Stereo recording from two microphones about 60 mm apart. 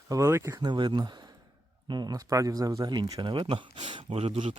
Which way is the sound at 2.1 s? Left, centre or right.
Right.